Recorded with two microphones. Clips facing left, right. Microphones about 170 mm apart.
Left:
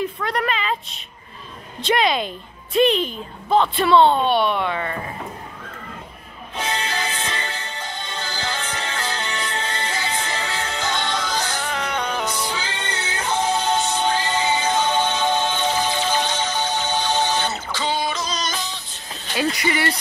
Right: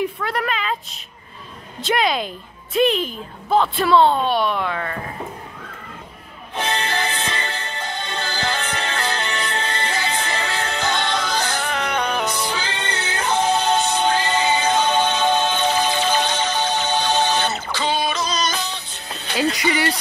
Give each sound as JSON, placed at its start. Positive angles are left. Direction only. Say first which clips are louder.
{"t": 0.2, "sound": "a woman's voice", "louder": "even", "side_deg": 0}
{"t": 1.8, "sound": "a woman's voice", "louder": "left 1 dB", "side_deg": 0}
{"t": 6.5, "sound": "music", "louder": "right 3 dB", "side_deg": -60}
{"t": 19.3, "sound": "music", "louder": "right 2 dB", "side_deg": -20}